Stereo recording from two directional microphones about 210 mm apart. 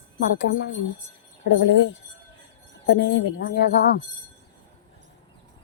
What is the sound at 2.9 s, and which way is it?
Speech, 60° left (ahead or behind).